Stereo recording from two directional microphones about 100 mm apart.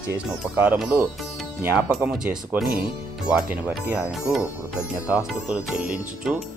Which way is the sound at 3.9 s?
5° right (ahead or behind).